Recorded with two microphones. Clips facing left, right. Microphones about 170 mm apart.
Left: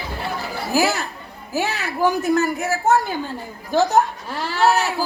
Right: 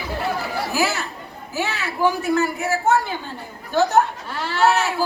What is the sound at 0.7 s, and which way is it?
Speech, 40° left (ahead or behind).